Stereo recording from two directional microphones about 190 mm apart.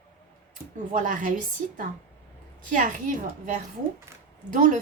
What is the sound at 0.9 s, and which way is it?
Speech, 40° right (ahead or behind).